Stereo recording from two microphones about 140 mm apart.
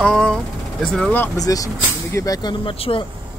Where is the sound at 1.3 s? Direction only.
25° left (ahead or behind).